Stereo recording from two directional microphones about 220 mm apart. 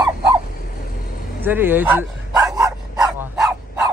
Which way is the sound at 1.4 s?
10° right (ahead or behind).